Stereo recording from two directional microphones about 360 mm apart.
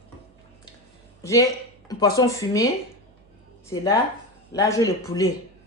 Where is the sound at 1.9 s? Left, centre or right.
Centre.